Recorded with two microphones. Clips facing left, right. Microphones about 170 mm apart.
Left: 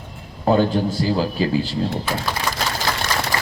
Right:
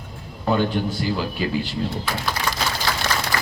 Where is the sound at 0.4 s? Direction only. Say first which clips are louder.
Left 4 dB; 35° left (ahead or behind).